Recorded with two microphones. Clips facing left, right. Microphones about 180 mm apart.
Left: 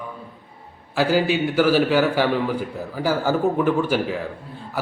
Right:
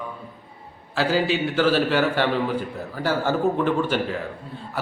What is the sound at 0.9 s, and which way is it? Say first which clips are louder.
A man's voice: left 2 dB; 10° left (ahead or behind).